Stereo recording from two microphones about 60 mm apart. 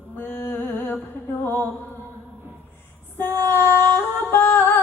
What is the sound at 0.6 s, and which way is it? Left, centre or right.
Humming, left.